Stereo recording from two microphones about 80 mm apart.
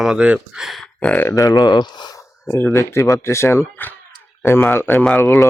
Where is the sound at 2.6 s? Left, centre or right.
Left.